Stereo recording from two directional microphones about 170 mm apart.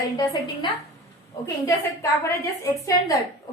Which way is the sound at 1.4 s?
15° left (ahead or behind).